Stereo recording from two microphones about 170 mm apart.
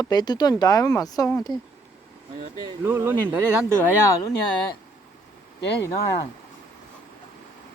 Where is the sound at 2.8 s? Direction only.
15° right (ahead or behind).